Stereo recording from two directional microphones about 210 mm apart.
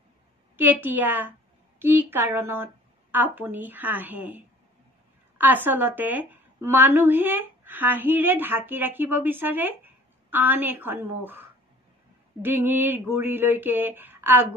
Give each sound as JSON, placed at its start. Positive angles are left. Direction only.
{"t": 0.6, "sound": "a woman's voice", "side_deg": -10}
{"t": 5.4, "sound": "a woman's voice", "side_deg": -10}